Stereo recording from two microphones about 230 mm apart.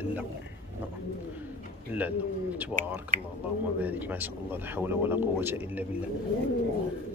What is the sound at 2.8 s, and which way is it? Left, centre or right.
Speech, right.